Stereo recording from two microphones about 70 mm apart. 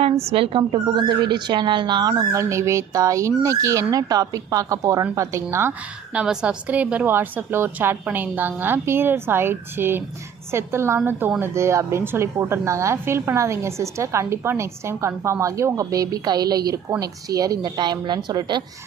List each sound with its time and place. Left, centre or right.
0.9 s a woman's voice: right
2.3 s a woman's voice: right
3.9 s a woman's voice: right
6.1 s a woman's voice: centre; by 18.6 s right